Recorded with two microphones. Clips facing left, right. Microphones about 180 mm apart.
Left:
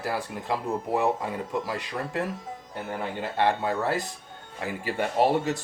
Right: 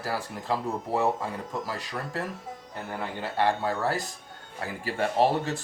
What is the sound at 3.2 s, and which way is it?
Speech, 20° left (ahead or behind).